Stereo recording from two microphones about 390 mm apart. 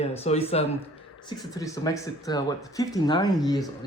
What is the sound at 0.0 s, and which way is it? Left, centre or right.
Speech, centre.